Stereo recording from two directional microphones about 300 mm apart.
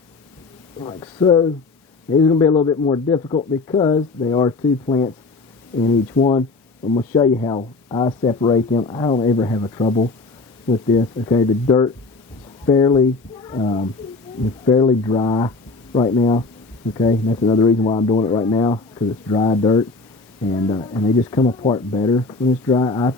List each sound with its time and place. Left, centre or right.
0.8 s a man's voice: centre